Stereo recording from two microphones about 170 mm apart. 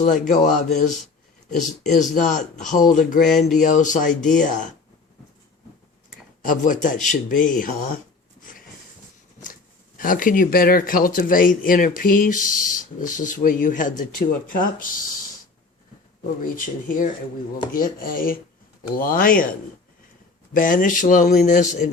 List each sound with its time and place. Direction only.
0.0 s speech: 45° left (ahead or behind)
6.4 s speech: 50° left (ahead or behind)
8.4 s a sound: 55° left (ahead or behind)
10.0 s speech: 55° left (ahead or behind)
16.4 s speech: 55° left (ahead or behind)